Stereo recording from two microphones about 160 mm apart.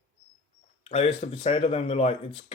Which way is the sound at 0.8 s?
40° left (ahead or behind).